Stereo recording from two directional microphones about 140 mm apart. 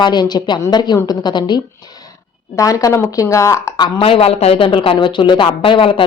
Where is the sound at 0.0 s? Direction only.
30° left (ahead or behind).